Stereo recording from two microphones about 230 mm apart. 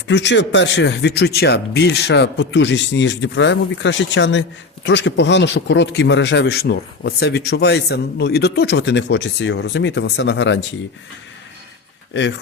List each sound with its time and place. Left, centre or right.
0.1 s speech: left
12.1 s speech: left